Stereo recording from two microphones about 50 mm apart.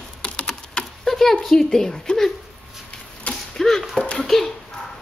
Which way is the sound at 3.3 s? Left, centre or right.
Centre.